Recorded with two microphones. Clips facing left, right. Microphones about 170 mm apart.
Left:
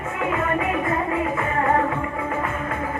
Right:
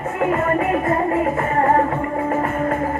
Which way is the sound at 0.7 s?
45° right (ahead or behind).